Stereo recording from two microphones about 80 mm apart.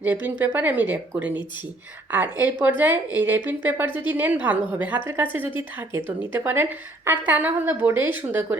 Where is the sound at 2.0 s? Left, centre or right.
Right.